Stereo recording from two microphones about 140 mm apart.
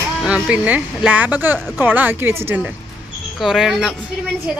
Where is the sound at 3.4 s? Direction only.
Centre (ahead or behind).